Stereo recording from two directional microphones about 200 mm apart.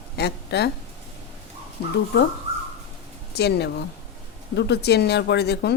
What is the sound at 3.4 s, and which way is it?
A woman's voice, 55° left (ahead or behind).